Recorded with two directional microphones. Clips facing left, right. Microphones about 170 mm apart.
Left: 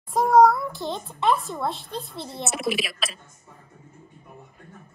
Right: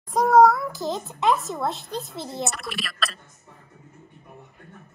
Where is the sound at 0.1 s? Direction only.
Centre (ahead or behind).